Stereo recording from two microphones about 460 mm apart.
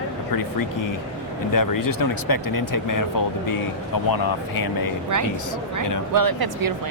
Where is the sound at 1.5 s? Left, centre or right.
Left.